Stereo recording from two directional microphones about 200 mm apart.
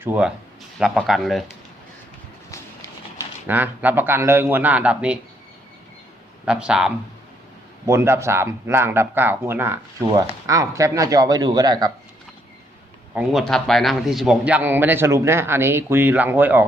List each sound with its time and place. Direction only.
0.0 s a man's voice: 5° right (ahead or behind)
3.4 s a man's voice: 10° right (ahead or behind)
6.4 s a man's voice: 5° right (ahead or behind)
13.1 s a man's voice: centre (ahead or behind)